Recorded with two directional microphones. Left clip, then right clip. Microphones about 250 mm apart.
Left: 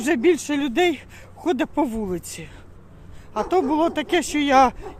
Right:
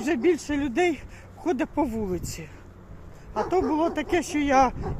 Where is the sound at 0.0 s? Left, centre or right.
Left.